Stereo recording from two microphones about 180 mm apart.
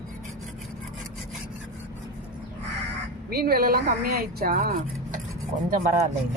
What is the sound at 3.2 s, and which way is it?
A woman's voice, 55° right (ahead or behind).